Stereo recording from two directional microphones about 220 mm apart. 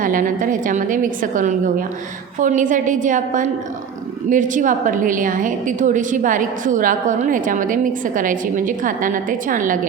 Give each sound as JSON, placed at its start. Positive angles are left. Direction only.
{"t": 0.0, "sound": "a woman's voice", "side_deg": -35}